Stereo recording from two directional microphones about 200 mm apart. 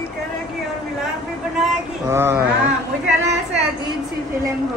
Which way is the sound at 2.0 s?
15° right (ahead or behind).